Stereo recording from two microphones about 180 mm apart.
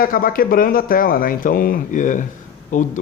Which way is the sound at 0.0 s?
55° left (ahead or behind).